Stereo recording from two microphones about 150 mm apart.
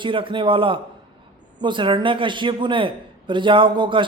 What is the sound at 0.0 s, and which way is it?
A man's voice, 35° right (ahead or behind).